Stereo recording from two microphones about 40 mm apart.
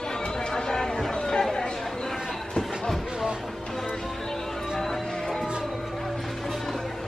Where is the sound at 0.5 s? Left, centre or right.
Centre.